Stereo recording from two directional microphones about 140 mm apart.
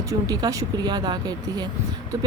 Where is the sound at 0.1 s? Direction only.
25° right (ahead or behind).